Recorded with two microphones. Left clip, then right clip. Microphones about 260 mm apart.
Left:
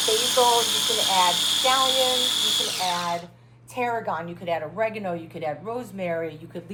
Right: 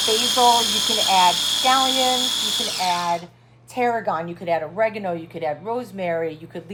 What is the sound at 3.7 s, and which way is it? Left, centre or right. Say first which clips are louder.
A woman's voice: right 5 dB; right.